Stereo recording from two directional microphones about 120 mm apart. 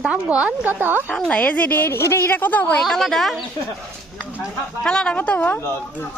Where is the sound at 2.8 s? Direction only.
Centre (ahead or behind).